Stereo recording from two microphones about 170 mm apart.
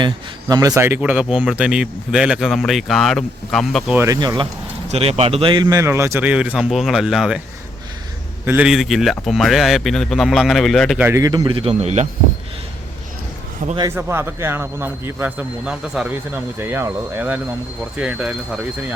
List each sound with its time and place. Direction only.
0.0 s speech: 20° right (ahead or behind); by 3.9 s centre (ahead or behind)
3.9 s a man's voice: 20° right (ahead or behind)
4.9 s a man's voice: 40° right (ahead or behind); by 7.4 s 5° right (ahead or behind)
8.4 s speech: 5° right (ahead or behind)
11.0 s a man's voice: 20° right (ahead or behind); by 12.0 s 40° right (ahead or behind)
13.9 s a man's voice: 15° right (ahead or behind)